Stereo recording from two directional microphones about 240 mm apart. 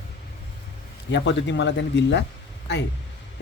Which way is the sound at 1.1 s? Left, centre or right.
Left.